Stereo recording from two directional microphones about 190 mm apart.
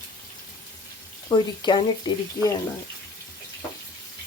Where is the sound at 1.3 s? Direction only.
25° left (ahead or behind).